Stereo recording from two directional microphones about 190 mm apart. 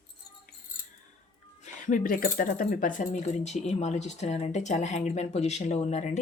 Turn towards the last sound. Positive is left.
turn(degrees=35)  # may be behind; listen again after turning